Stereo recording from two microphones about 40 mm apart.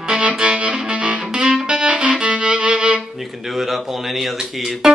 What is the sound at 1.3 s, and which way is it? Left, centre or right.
Music, centre.